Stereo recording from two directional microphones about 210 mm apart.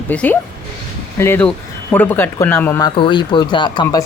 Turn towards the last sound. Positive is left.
turn(degrees=20)  # may be behind; listen again after turning